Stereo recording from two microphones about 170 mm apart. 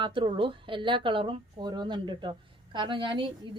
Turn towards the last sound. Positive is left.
turn(degrees=-30)  # may be behind; listen again after turning